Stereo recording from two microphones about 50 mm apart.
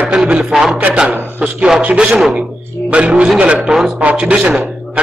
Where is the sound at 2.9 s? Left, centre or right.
Right.